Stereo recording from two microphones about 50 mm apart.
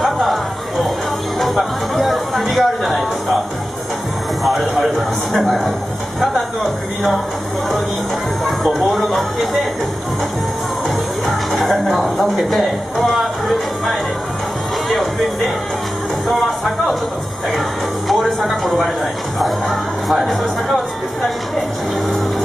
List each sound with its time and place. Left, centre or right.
0.0 s chatter: centre
1.4 s a sound: centre
4.5 s speech: centre
8.5 s speech: centre
11.2 s music: centre
16.3 s speech: centre
18.0 s speech: centre